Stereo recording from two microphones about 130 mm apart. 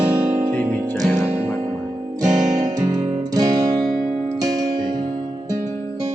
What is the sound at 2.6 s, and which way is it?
Music, 30° right (ahead or behind).